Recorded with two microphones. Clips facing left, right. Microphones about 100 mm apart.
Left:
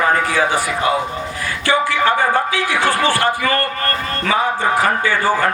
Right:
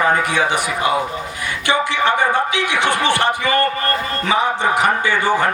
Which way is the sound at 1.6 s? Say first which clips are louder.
Left 1 dB; 20° right (ahead or behind).